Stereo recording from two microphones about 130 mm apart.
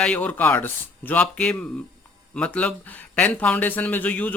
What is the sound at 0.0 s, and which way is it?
Speech, 10° left (ahead or behind).